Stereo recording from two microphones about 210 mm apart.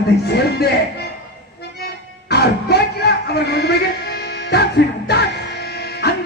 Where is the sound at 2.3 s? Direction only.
50° left (ahead or behind).